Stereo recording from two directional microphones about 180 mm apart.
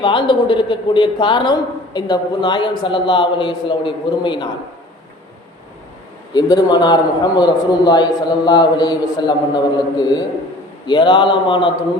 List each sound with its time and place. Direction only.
0.0 s a woman's voice: 25° left (ahead or behind)
6.3 s a woman's voice: 25° left (ahead or behind)